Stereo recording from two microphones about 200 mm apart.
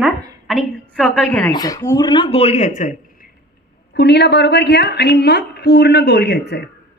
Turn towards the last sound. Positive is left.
turn(degrees=55)  # may be behind; listen again after turning